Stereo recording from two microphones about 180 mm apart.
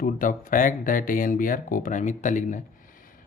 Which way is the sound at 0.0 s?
50° left (ahead or behind).